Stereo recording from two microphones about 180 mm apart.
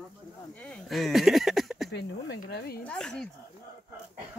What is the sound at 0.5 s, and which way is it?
Speech, 5° left (ahead or behind).